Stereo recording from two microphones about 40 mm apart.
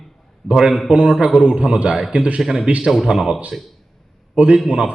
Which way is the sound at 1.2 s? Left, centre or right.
Right.